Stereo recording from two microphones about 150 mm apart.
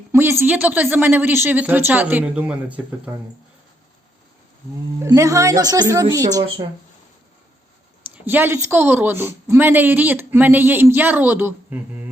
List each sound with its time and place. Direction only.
0.1 s a woman's voice: 15° right (ahead or behind)
5.0 s a woman's voice: 20° right (ahead or behind)
8.1 s a woman's voice: 10° right (ahead or behind)